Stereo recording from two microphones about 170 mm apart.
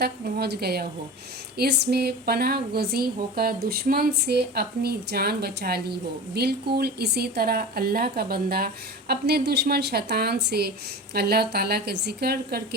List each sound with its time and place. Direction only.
0.0 s speech: 70° right (ahead or behind)